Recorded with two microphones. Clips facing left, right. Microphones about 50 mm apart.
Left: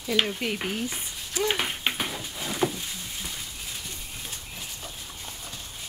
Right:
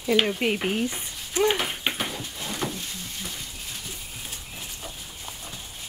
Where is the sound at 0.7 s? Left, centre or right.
Right.